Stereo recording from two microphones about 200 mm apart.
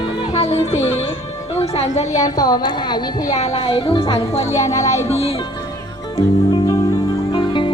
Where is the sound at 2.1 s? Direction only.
20° left (ahead or behind).